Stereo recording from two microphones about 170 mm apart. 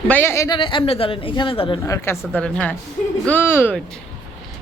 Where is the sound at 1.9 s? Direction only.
10° left (ahead or behind).